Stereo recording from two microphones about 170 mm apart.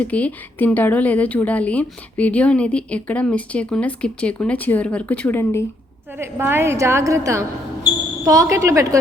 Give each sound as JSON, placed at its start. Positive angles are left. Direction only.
{"t": 0.0, "sound": "a woman's voice", "side_deg": 10}
{"t": 6.1, "sound": "a woman's voice", "side_deg": -15}